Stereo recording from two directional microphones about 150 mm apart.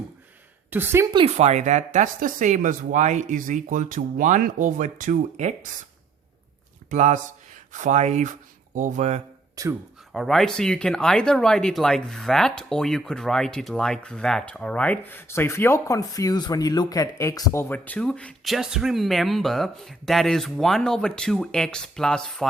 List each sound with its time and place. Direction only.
0.7 s speech: 15° right (ahead or behind)
1.1 s speech: 40° right (ahead or behind)
6.9 s speech: 55° right (ahead or behind)
9.6 s speech: 25° right (ahead or behind)
10.1 s speech: centre (ahead or behind)